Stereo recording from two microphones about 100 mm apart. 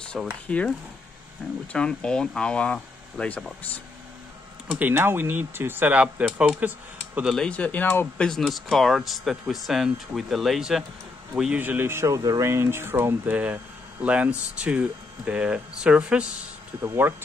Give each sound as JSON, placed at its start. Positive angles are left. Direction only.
{"t": 0.2, "sound": "speech", "side_deg": 0}
{"t": 0.5, "sound": "speech", "side_deg": 15}
{"t": 4.7, "sound": "speech", "side_deg": -20}
{"t": 7.2, "sound": "speech", "side_deg": 5}
{"t": 8.3, "sound": "speech", "side_deg": 0}
{"t": 11.6, "sound": "speech", "side_deg": -20}
{"t": 16.8, "sound": "speech", "side_deg": -20}